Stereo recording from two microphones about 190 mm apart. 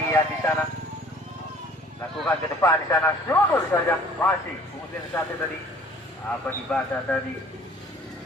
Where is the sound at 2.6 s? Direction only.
15° left (ahead or behind).